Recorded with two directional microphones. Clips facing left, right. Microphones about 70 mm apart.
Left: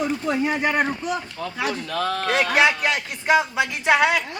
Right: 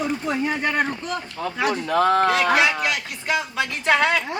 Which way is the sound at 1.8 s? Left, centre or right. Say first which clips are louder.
Right 10 dB; right.